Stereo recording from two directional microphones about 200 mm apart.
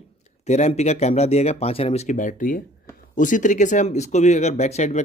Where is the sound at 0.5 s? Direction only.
35° left (ahead or behind).